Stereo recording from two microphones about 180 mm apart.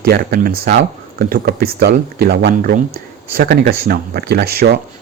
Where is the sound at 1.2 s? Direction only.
55° right (ahead or behind).